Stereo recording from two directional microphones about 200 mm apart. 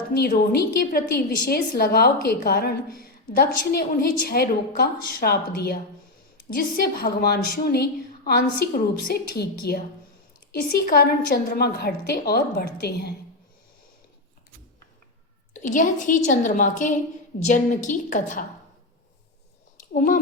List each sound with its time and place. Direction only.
0.1 s a woman's voice: 50° left (ahead or behind)
15.6 s a woman's voice: 40° left (ahead or behind)
19.9 s speech: 40° left (ahead or behind)